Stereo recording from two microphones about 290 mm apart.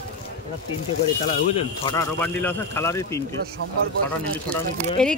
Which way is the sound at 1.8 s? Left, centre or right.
Centre.